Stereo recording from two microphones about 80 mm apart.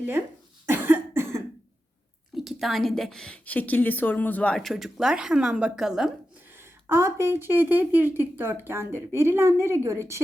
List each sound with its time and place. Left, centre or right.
0.7 s cough: right
2.3 s a woman's voice: centre
4.5 s speech: centre
6.6 s speech: right